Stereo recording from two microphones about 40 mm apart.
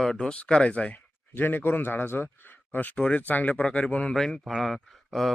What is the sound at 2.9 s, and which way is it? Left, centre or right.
Speech, left.